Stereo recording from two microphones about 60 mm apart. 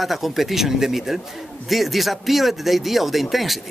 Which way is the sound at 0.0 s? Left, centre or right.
Centre.